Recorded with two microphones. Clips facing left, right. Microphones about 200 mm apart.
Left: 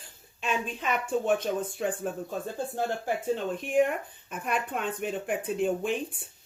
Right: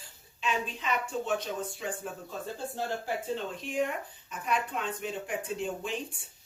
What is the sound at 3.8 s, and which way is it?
Speech, 55° left (ahead or behind).